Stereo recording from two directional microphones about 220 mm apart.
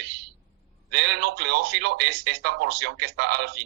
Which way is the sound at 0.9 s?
50° right (ahead or behind).